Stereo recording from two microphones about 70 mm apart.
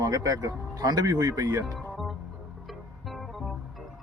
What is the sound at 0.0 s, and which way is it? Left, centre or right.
Speech, right.